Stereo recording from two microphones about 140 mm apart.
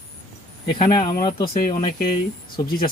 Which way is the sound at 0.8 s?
35° left (ahead or behind).